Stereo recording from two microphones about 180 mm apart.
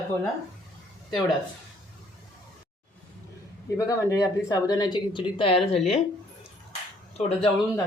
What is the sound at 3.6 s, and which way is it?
A man's voice, 15° left (ahead or behind).